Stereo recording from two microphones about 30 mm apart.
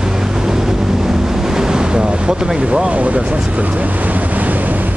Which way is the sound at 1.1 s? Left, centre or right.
Centre.